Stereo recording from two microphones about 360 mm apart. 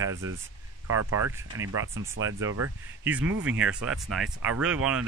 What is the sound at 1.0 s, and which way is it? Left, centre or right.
Speech, right.